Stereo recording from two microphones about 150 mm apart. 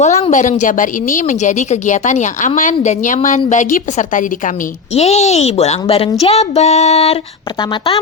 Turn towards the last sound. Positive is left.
turn(degrees=45)  # may be behind; listen again after turning